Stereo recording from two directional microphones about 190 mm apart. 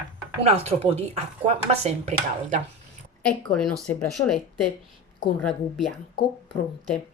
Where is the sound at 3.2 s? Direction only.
5° left (ahead or behind).